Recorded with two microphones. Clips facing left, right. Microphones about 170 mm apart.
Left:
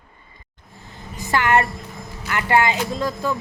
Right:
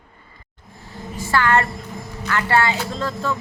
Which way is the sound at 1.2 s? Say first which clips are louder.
Even; 20° left (ahead or behind).